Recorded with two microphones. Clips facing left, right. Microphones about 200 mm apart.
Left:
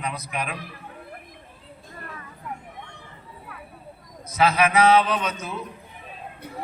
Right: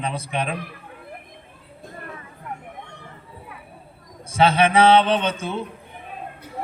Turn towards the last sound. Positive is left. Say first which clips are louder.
# right 5 dB
turn(degrees=-30)  # may be behind; listen again after turning